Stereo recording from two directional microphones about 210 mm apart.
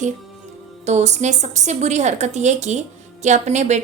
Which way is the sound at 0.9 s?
35° right (ahead or behind).